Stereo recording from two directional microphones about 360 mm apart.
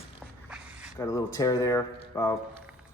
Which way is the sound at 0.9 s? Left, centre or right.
Centre.